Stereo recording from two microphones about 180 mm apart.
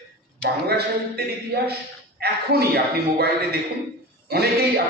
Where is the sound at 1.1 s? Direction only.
60° right (ahead or behind).